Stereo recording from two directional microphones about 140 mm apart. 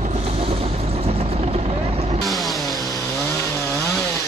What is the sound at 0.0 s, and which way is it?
Vehicle, 50° right (ahead or behind).